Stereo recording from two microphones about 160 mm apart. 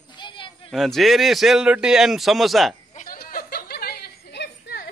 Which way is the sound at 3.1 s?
65° left (ahead or behind).